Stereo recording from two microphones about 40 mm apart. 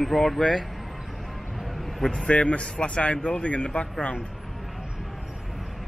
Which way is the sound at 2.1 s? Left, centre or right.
Left.